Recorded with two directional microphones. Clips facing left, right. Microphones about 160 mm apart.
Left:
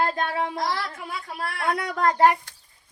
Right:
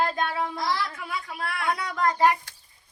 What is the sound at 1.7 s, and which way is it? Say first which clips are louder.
Speech: left 5 dB; 55° left (ahead or behind).